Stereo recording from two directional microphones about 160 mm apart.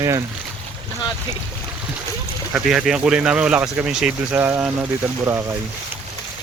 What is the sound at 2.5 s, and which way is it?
Speech, 5° right (ahead or behind).